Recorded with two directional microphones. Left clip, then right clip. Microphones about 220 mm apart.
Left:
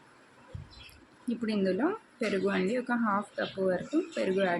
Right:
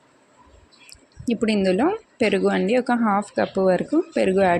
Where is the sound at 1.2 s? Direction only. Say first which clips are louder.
Right 10 dB; 30° right (ahead or behind).